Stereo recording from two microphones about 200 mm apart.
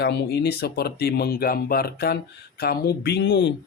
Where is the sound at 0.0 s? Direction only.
55° left (ahead or behind).